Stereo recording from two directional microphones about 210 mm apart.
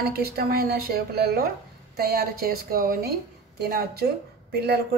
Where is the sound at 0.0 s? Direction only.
45° right (ahead or behind).